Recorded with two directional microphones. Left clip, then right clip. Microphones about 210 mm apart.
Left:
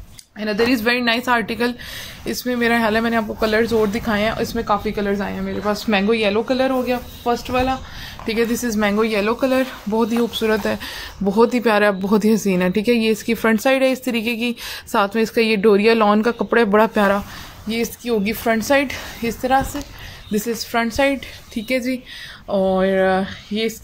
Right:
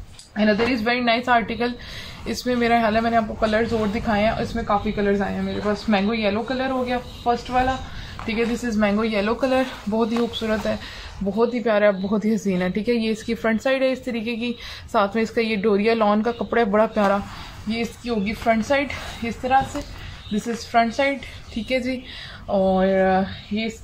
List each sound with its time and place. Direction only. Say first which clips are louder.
0.4 s speech: left 1 dB; 45° left (ahead or behind)
21.6 s speech: left 2 dB; 35° left (ahead or behind)